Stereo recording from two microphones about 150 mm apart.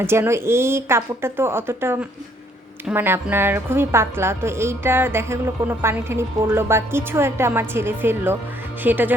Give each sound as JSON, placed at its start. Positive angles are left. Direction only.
{"t": 0.0, "sound": "a woman's voice", "side_deg": -15}